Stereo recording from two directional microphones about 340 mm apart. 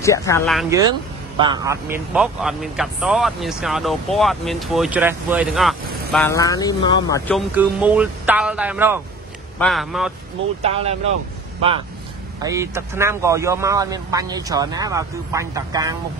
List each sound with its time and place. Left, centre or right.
0.0 s a man's voice: centre
7.5 s a man's voice: centre
10.6 s speech: centre
12.4 s speech: centre